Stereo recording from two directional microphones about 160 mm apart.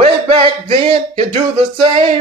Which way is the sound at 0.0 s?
35° right (ahead or behind).